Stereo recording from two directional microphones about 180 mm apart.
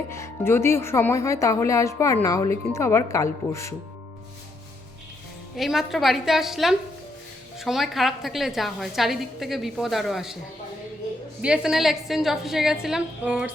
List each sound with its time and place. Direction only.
0.1 s speech: 15° left (ahead or behind)
5.5 s a woman's voice: centre (ahead or behind)
11.4 s a woman's voice: 5° right (ahead or behind)